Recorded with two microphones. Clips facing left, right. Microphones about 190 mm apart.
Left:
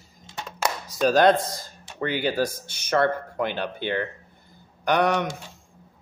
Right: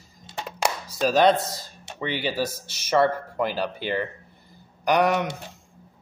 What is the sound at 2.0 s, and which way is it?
Speech, 5° right (ahead or behind).